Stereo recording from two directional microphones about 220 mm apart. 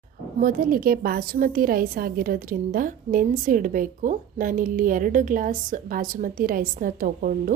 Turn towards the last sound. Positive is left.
turn(degrees=-40)  # may be behind; listen again after turning